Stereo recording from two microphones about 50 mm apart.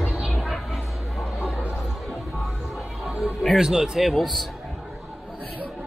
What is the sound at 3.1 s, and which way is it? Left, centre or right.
Music, centre.